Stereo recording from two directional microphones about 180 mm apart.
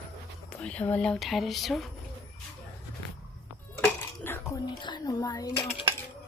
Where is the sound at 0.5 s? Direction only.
5° left (ahead or behind).